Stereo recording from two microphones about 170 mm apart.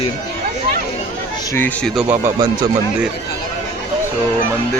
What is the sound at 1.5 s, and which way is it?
Speech, 10° left (ahead or behind).